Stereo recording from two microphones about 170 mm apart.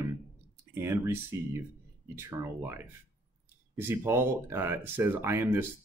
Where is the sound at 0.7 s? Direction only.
15° right (ahead or behind).